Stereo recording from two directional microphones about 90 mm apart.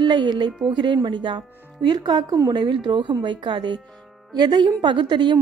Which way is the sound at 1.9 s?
50° right (ahead or behind).